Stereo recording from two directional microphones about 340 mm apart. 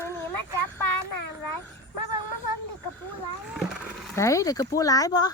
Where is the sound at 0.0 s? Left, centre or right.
Centre.